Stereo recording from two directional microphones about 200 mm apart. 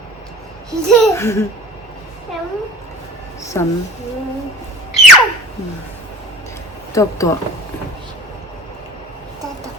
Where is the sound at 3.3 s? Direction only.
15° left (ahead or behind).